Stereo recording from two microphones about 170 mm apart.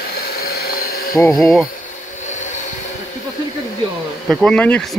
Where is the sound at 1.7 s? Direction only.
50° left (ahead or behind).